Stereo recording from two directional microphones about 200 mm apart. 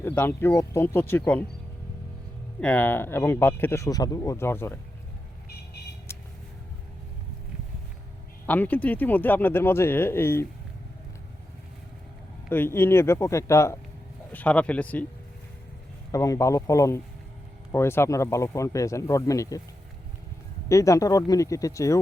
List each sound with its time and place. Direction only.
0.0 s speech: 10° left (ahead or behind)
2.6 s speech: 5° left (ahead or behind)
8.4 s speech: 10° left (ahead or behind)
12.5 s speech: 10° left (ahead or behind)
16.1 s speech: 15° left (ahead or behind)
20.7 s speech: 15° left (ahead or behind)